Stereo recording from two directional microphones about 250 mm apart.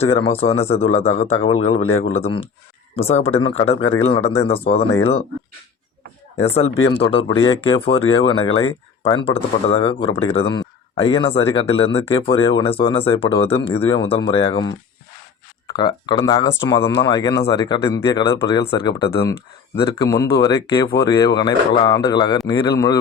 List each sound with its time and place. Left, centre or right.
0.0 s speech: left
6.9 s speech: left